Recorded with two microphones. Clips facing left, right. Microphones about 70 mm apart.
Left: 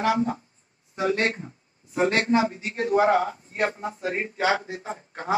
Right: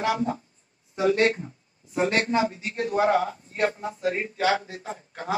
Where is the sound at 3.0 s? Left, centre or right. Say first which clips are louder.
Left 1 dB; centre.